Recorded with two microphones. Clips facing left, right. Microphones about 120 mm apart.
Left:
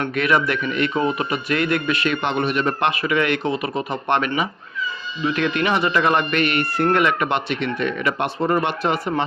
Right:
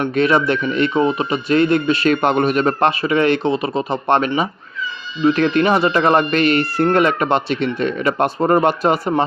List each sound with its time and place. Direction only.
0.0 s a man's voice: 30° right (ahead or behind)